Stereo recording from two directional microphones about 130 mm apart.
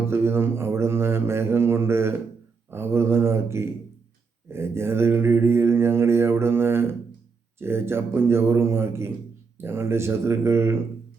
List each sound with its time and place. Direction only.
0.1 s mantra: 20° right (ahead or behind)